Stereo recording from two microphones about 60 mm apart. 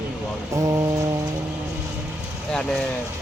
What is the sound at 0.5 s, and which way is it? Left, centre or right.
Speech, right.